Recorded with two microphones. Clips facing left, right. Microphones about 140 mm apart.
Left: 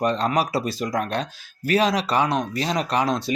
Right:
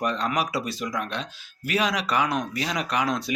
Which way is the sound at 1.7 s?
30° left (ahead or behind).